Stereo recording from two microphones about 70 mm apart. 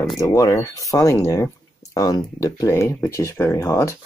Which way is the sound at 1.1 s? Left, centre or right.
Left.